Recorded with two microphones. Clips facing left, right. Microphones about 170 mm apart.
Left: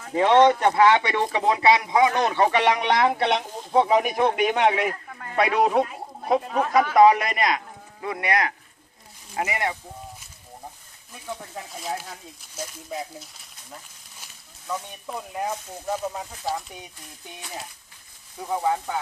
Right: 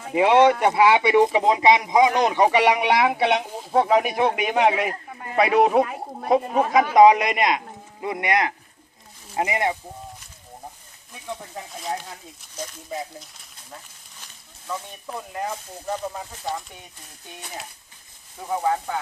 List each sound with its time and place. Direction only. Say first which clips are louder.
0.0 s speech: right 1 dB; 10° right (ahead or behind)
5.0 s a sound: right 2 dB; 20° right (ahead or behind)
5.4 s speech: right 3 dB; 5° right (ahead or behind)
5.8 s a sound: right 3 dB; 60° right (ahead or behind)
6.5 s speech: right 2 dB; 15° right (ahead or behind)
11.1 s speech: right 1 dB; centre (ahead or behind)
13.7 s a sound: right 1 dB; 5° left (ahead or behind)
14.7 s speech: even; centre (ahead or behind)
18.4 s speech: right 1 dB; centre (ahead or behind)